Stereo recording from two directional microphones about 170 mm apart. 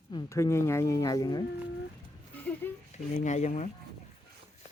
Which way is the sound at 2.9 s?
40° left (ahead or behind).